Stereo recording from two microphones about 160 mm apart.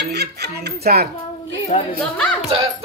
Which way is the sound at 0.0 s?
90° right.